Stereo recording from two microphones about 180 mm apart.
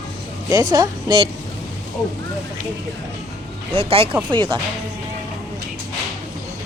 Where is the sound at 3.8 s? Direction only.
30° right (ahead or behind).